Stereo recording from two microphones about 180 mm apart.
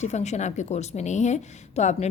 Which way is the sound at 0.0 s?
40° left (ahead or behind).